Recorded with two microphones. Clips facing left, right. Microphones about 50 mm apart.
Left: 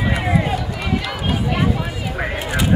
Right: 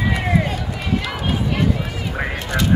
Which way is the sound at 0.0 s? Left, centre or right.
Centre.